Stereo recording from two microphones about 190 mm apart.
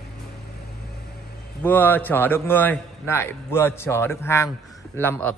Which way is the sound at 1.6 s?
10° left (ahead or behind).